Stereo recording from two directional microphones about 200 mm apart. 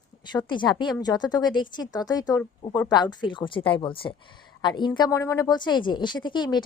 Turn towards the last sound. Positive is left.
turn(degrees=20)  # may be behind; listen again after turning